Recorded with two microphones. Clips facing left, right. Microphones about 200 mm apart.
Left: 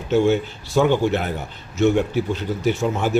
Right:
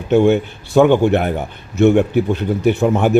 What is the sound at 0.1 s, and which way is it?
A man's voice, 60° right (ahead or behind).